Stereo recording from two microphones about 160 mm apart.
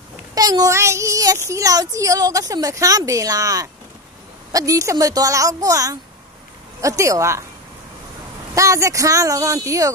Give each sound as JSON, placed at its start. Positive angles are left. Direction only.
{"t": 0.3, "sound": "a child's voice", "side_deg": -25}
{"t": 8.5, "sound": "speech", "side_deg": -20}